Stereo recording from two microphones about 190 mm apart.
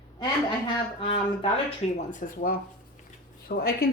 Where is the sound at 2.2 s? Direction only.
45° left (ahead or behind).